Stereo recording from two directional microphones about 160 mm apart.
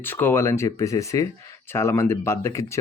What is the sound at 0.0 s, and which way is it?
Speech, 15° left (ahead or behind).